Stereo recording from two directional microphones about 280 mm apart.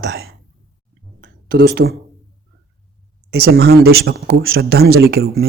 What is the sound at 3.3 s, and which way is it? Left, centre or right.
Speech, right.